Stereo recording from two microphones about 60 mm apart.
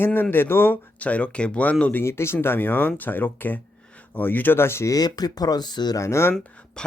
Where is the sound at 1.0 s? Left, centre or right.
Left.